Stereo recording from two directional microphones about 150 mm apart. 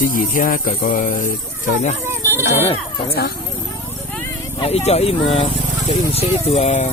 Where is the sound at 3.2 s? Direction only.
90° left.